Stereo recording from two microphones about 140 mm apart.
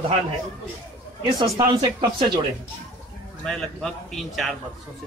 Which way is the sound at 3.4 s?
Centre (ahead or behind).